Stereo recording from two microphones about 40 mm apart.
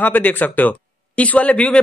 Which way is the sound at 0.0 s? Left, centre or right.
Left.